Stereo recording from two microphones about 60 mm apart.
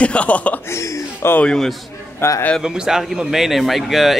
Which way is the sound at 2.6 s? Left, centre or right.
Centre.